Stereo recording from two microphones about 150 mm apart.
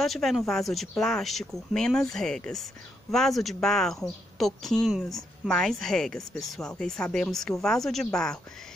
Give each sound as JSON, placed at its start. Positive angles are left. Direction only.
{"t": 0.0, "sound": "speech", "side_deg": 0}